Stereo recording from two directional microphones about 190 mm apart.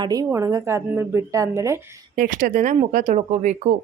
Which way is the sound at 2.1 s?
45° right (ahead or behind).